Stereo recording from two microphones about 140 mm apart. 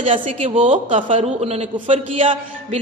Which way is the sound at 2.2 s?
45° right (ahead or behind).